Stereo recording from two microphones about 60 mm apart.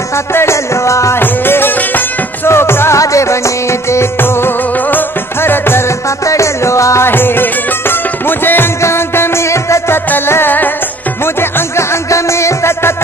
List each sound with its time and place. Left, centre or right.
0.3 s music: left
1.2 s music: left
3.0 s music: left
4.9 s music: left
6.2 s music: left
7.1 s music: left
11.7 s music: left